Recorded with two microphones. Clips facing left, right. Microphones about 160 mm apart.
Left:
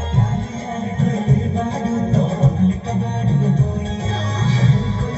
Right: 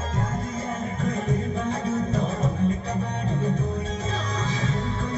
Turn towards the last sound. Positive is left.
turn(degrees=35)  # may be behind; listen again after turning